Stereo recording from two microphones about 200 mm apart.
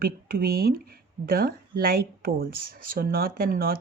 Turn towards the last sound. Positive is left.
turn(degrees=-45)  # may be behind; listen again after turning